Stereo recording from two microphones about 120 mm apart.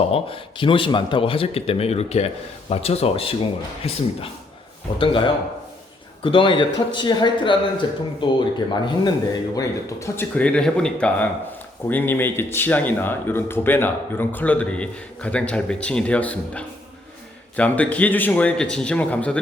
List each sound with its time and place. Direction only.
0.1 s speech: 50° left (ahead or behind)
4.9 s speech: 45° left (ahead or behind)
10.2 s speech: 10° left (ahead or behind)